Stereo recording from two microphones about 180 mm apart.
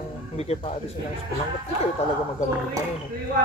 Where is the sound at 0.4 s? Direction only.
35° left (ahead or behind).